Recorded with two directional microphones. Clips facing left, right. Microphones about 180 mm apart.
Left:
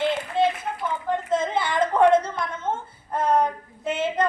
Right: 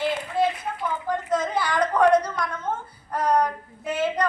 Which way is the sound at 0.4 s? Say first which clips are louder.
Left 1 dB; 25° left (ahead or behind).